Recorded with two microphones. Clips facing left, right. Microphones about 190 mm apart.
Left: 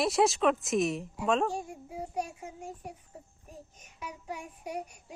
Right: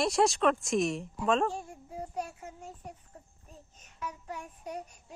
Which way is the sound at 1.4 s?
15° left (ahead or behind).